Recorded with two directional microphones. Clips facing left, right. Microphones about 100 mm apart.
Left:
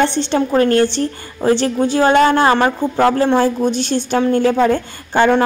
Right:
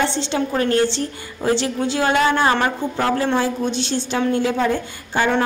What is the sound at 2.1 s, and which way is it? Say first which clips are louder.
A woman's voice: left 4 dB; 45° left (ahead or behind).